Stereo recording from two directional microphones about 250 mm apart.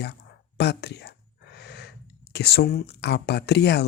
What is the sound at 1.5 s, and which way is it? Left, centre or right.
Gasp, left.